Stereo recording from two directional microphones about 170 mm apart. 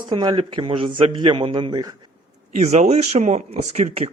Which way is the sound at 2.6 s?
40° right (ahead or behind).